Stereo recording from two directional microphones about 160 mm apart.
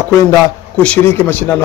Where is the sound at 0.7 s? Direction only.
10° left (ahead or behind).